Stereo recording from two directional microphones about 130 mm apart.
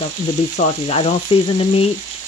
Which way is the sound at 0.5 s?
70° left (ahead or behind).